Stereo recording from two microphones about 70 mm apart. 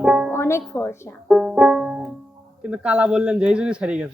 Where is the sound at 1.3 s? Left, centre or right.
Centre.